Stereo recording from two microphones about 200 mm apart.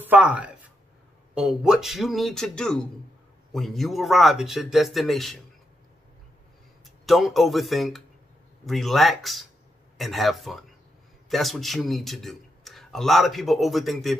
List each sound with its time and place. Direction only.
0.0 s speech: 5° right (ahead or behind)
7.1 s speech: centre (ahead or behind)